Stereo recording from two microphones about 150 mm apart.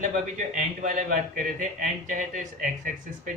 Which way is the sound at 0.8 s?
65° right (ahead or behind).